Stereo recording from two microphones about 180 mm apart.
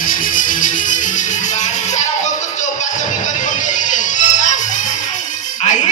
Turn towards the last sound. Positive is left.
turn(degrees=45)  # may be behind; listen again after turning